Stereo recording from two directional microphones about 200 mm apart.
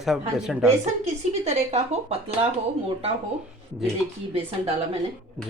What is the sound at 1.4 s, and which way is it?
Speech, 35° right (ahead or behind).